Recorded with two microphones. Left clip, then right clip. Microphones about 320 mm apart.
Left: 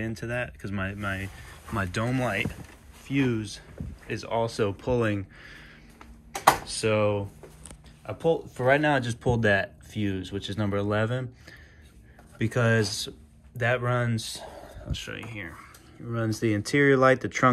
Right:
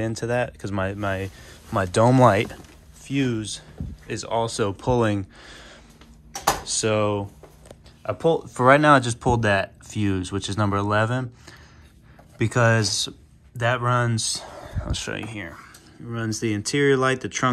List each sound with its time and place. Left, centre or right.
0.0 s speech: centre
3.1 s speech: centre